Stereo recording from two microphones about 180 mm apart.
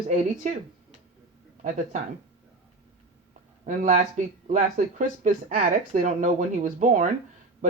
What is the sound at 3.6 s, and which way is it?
Speech, 45° right (ahead or behind).